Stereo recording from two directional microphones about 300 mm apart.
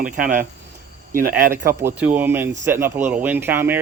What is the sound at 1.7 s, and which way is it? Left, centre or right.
Speech, centre.